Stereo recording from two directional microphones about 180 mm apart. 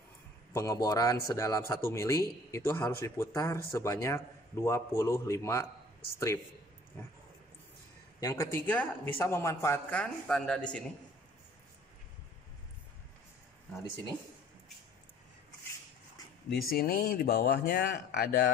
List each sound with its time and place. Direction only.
0.5 s speech: 15° left (ahead or behind)
8.2 s speech: 20° left (ahead or behind)
16.4 s speech: 55° left (ahead or behind)